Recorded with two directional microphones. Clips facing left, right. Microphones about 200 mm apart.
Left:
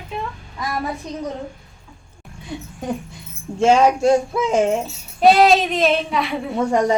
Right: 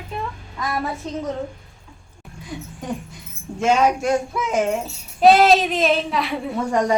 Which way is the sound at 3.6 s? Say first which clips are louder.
Left 4 dB; 30° left (ahead or behind).